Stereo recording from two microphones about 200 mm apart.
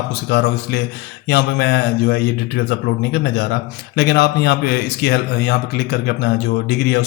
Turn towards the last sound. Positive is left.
turn(degrees=55)  # may be behind; listen again after turning